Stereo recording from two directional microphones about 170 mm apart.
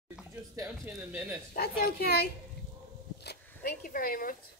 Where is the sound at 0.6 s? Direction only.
10° right (ahead or behind).